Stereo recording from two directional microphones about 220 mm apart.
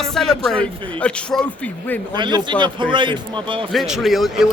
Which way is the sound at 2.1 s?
20° right (ahead or behind).